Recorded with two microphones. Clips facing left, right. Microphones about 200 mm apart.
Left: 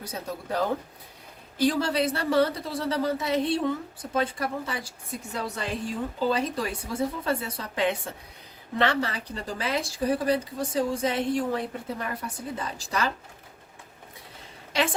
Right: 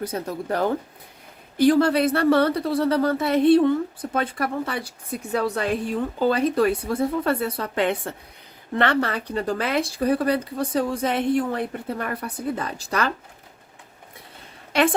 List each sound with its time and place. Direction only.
0.0 s speech: 55° right (ahead or behind)